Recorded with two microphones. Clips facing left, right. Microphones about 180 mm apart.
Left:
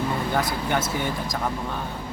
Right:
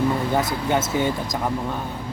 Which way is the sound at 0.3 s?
20° right (ahead or behind).